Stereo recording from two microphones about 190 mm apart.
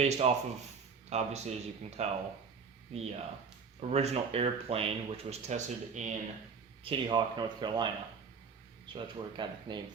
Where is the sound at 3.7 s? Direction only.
35° right (ahead or behind).